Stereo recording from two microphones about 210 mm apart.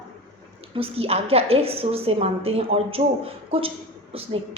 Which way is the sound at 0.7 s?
25° right (ahead or behind).